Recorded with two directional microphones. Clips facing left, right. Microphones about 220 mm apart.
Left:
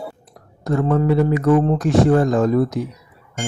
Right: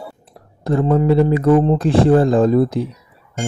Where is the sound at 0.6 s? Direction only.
30° right (ahead or behind).